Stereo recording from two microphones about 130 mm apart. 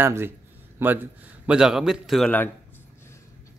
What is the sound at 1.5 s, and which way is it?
Speech, 5° right (ahead or behind).